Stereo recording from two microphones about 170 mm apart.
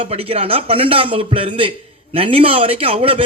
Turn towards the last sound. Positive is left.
turn(degrees=-35)  # may be behind; listen again after turning